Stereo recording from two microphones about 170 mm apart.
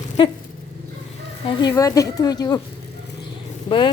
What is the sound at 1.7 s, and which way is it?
Speech, 20° left (ahead or behind).